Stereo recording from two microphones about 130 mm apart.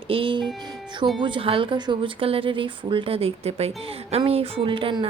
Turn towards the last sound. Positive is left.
turn(degrees=-40)  # may be behind; listen again after turning